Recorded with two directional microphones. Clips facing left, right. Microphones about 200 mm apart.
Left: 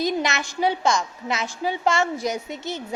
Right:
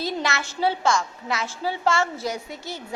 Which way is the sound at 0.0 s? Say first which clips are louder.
Left 3 dB; 15° left (ahead or behind).